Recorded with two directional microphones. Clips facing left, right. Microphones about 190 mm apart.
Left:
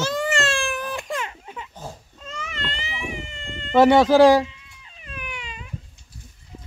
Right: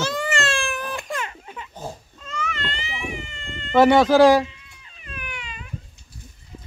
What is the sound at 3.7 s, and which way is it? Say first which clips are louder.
Speech: even; 30° left (ahead or behind).